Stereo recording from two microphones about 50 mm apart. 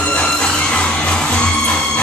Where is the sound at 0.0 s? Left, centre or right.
Left.